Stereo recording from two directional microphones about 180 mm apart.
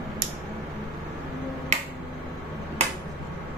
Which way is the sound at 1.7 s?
40° right (ahead or behind).